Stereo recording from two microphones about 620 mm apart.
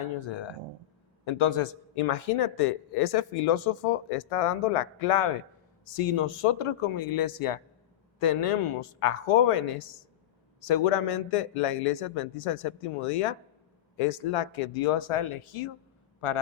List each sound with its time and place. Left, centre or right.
0.0 s a man's voice: left